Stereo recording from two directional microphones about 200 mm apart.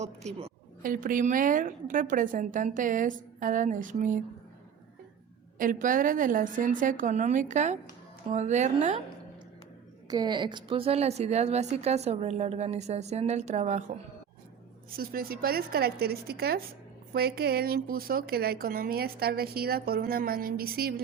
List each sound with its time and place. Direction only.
0.0 s a woman's voice: 35° right (ahead or behind)
0.8 s a woman's voice: 45° right (ahead or behind)
5.5 s a woman's voice: 40° right (ahead or behind)
10.1 s a woman's voice: 20° right (ahead or behind)
14.8 s a woman's voice: 45° right (ahead or behind)